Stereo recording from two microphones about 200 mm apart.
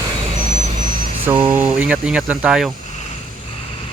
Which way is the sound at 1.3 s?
25° right (ahead or behind).